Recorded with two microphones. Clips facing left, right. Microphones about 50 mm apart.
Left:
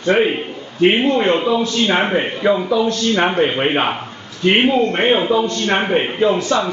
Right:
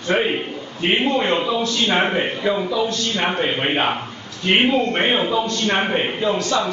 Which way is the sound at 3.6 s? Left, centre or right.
Centre.